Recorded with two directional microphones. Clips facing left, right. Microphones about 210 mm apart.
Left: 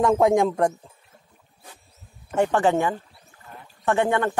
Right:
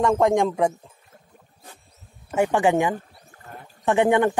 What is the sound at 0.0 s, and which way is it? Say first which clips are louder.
Speech: left 1 dB; centre (ahead or behind).